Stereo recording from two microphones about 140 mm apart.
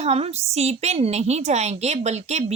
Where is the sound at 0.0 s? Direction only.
45° right (ahead or behind).